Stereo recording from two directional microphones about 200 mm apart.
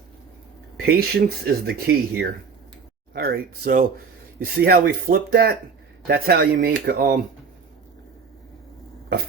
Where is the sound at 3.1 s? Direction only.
50° right (ahead or behind).